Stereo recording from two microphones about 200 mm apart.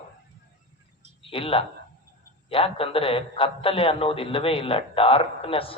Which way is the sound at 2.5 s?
25° left (ahead or behind).